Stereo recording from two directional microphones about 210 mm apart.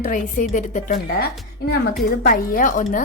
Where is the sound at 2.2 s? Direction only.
40° left (ahead or behind).